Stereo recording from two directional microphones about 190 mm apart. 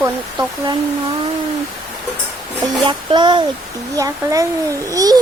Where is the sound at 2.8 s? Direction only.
25° right (ahead or behind).